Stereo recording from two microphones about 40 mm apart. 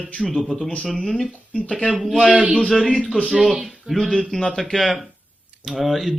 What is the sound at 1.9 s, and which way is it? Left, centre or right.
Speech, centre.